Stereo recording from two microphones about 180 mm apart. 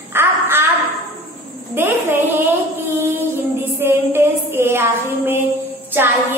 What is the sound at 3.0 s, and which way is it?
Music, 10° right (ahead or behind).